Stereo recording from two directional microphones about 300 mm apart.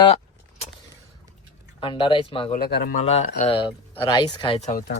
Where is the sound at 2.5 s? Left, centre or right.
Left.